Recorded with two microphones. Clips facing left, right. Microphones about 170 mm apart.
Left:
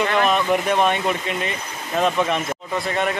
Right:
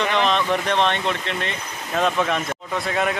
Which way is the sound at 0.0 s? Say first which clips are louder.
Left 1 dB; 10° left (ahead or behind).